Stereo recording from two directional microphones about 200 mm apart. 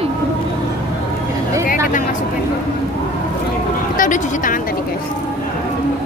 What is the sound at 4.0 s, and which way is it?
Speech, 40° left (ahead or behind).